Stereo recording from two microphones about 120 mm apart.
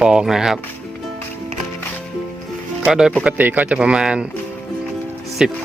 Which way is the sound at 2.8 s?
5° right (ahead or behind).